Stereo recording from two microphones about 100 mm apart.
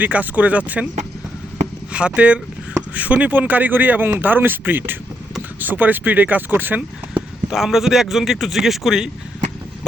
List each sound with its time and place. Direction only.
0.0 s speech: 15° right (ahead or behind)
1.9 s speech: 10° right (ahead or behind)
7.5 s speech: 5° right (ahead or behind)